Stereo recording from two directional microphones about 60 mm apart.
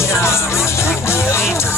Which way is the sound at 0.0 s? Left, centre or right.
Left.